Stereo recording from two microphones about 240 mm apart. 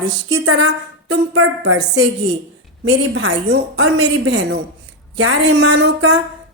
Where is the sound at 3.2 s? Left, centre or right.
Right.